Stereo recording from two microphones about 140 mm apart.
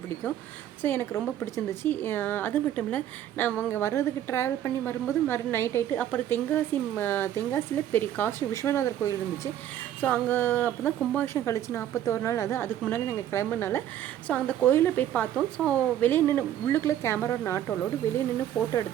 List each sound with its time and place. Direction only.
0.8 s a woman's voice: 15° left (ahead or behind)